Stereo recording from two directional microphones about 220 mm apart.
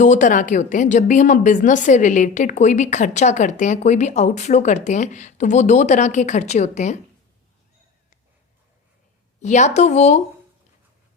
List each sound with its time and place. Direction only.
0.0 s a woman's voice: 35° left (ahead or behind)
9.4 s a woman's voice: 30° left (ahead or behind)